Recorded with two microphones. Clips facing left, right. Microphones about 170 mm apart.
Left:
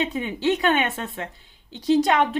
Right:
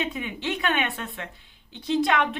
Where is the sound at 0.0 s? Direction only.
35° left (ahead or behind).